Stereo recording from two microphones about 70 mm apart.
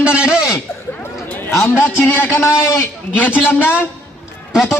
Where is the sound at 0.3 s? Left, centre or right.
Centre.